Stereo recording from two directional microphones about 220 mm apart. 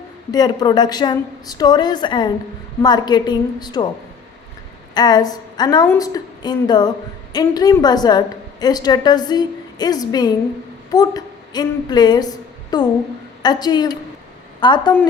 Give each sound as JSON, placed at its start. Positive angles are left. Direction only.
{"t": 0.3, "sound": "a woman's voice", "side_deg": 20}
{"t": 4.9, "sound": "a woman's voice", "side_deg": 20}